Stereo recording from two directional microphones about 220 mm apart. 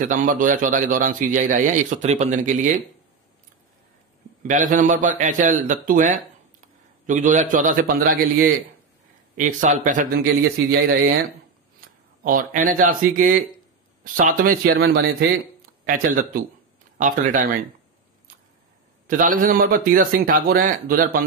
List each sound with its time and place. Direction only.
0.0 s a man's voice: 35° right (ahead or behind)
4.4 s a man's voice: 35° right (ahead or behind)
12.2 s a man's voice: 40° right (ahead or behind)
19.0 s a man's voice: 40° right (ahead or behind)